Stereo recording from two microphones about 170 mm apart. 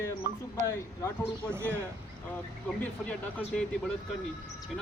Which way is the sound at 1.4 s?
15° right (ahead or behind).